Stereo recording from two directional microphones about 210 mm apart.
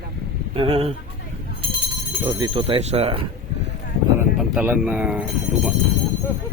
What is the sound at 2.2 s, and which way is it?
Speech, 25° right (ahead or behind).